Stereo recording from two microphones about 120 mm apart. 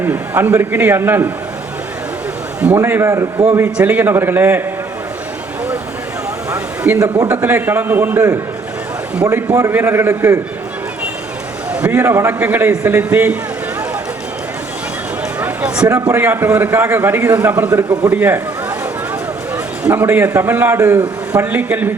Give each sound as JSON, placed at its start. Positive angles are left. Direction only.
{"t": 0.0, "sound": "a man's voice", "side_deg": -15}
{"t": 2.7, "sound": "a man's voice", "side_deg": -20}
{"t": 6.9, "sound": "a man's voice", "side_deg": -25}
{"t": 7.4, "sound": "a man's voice", "side_deg": -15}
{"t": 11.7, "sound": "a man's voice", "side_deg": -15}
{"t": 15.4, "sound": "a sound", "side_deg": -10}
{"t": 15.9, "sound": "a man's voice", "side_deg": -25}
{"t": 19.8, "sound": "a man's voice", "side_deg": -15}